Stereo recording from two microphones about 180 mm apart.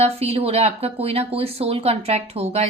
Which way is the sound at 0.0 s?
35° right (ahead or behind).